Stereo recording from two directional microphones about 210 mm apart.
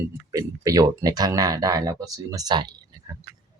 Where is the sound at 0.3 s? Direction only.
15° right (ahead or behind).